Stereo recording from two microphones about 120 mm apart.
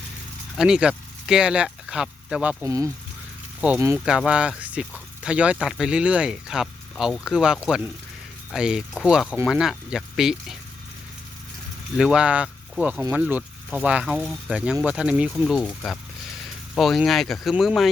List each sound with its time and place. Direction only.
0.5 s speech: 5° right (ahead or behind)
2.6 s speech: 25° right (ahead or behind)
3.6 s speech: 10° right (ahead or behind)
11.9 s speech: 5° right (ahead or behind)